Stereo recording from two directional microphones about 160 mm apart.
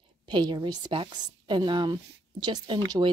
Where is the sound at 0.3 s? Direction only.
25° right (ahead or behind).